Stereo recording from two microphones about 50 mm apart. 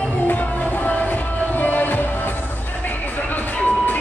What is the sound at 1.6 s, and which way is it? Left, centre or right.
Music, left.